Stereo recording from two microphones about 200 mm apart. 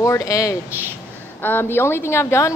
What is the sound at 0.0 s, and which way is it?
Speech, 15° left (ahead or behind).